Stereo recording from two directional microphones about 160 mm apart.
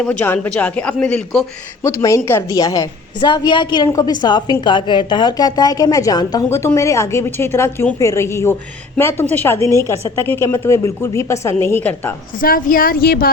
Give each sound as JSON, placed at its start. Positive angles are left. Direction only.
{"t": 0.0, "sound": "a woman's voice", "side_deg": 10}
{"t": 1.8, "sound": "a woman's voice", "side_deg": 20}
{"t": 12.4, "sound": "speech", "side_deg": 60}